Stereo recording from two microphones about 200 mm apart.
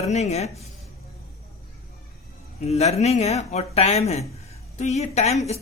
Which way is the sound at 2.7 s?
30° left (ahead or behind).